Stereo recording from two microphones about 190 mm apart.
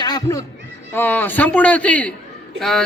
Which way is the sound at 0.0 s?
20° left (ahead or behind).